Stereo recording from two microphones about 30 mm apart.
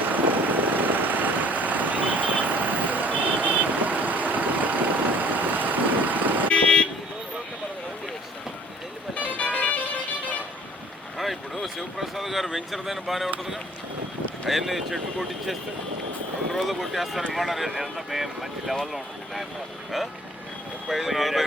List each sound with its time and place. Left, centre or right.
0.1 s vehicle: right
6.5 s car alarm: left
9.1 s vehicle: left
11.2 s a sound: centre
14.5 s speech: centre
16.6 s speech: centre
18.9 s vehicle: centre
20.8 s speech: centre